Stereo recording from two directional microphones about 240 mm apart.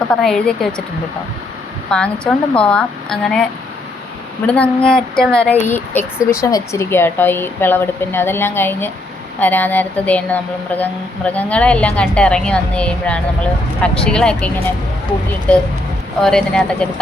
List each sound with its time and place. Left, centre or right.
0.1 s a woman's voice: centre
1.9 s a woman's voice: centre
4.4 s a woman's voice: centre
16.2 s a woman's voice: centre